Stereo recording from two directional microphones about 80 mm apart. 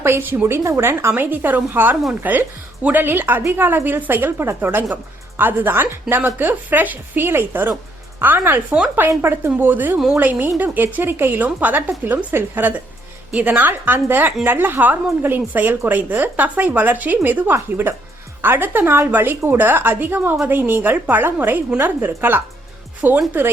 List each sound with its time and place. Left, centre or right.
0.0 s speech: right